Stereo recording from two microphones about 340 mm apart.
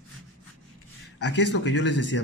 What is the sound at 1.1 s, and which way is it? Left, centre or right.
Speech, left.